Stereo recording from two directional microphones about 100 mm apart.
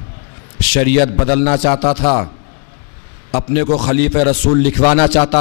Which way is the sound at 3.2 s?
15° left (ahead or behind).